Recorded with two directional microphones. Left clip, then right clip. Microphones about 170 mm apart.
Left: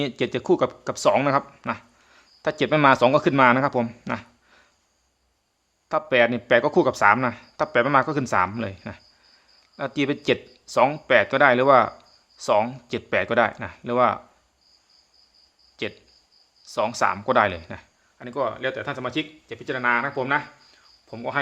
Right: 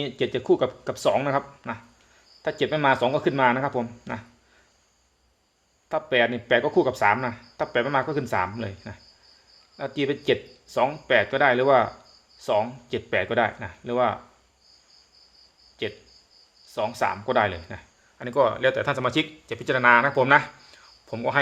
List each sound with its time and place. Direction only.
0.0 s speech: 25° left (ahead or behind)
5.9 s speech: 25° left (ahead or behind)
15.8 s speech: 30° left (ahead or behind)
18.2 s speech: 5° right (ahead or behind)